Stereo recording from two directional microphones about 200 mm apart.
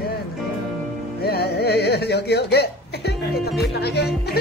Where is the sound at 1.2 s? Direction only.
50° left (ahead or behind).